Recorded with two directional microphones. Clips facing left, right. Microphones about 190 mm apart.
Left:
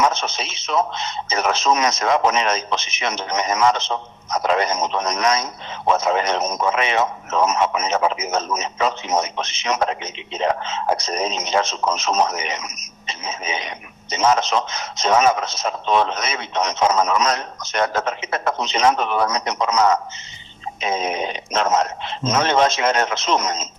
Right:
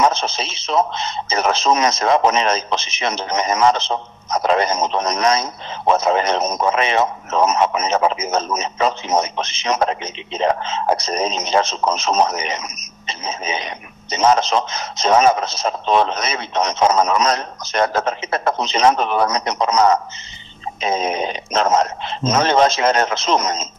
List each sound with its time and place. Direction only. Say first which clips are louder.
0.0 s speech: right 3 dB; 30° right (ahead or behind)